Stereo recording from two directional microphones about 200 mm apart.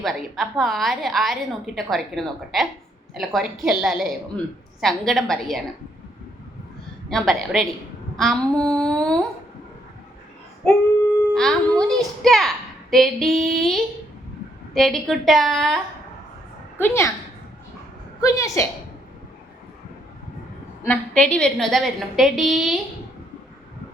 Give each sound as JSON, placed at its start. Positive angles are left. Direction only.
{"t": 0.0, "sound": "a woman's voice", "side_deg": 0}
{"t": 7.1, "sound": "a woman's voice", "side_deg": 0}
{"t": 11.3, "sound": "a woman's voice", "side_deg": 5}
{"t": 16.7, "sound": "a woman's voice", "side_deg": 10}
{"t": 18.2, "sound": "a woman's voice", "side_deg": 15}
{"t": 20.8, "sound": "a woman's voice", "side_deg": 5}